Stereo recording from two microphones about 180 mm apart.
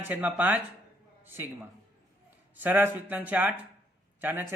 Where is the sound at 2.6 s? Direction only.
10° right (ahead or behind).